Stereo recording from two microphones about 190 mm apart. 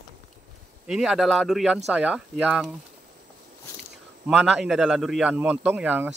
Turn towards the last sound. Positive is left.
turn(degrees=-10)  # may be behind; listen again after turning